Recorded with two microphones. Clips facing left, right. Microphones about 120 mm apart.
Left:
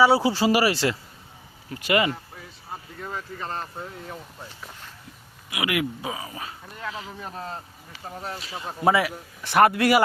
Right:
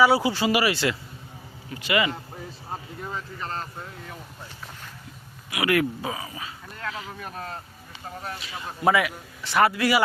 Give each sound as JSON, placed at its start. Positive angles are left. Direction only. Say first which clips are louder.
{"t": 0.0, "sound": "speech", "louder": "left 1 dB", "side_deg": 30}
{"t": 3.2, "sound": "speech", "louder": "left 2 dB", "side_deg": 15}
{"t": 5.5, "sound": "speech", "louder": "right 3 dB", "side_deg": 15}
{"t": 6.9, "sound": "speech", "louder": "even", "side_deg": 30}
{"t": 8.4, "sound": "speech", "louder": "left 2 dB", "side_deg": 35}
{"t": 9.6, "sound": "speech", "louder": "left 3 dB", "side_deg": 55}